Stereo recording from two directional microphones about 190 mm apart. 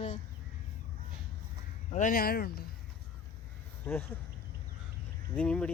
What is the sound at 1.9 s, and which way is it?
Speech, 45° left (ahead or behind).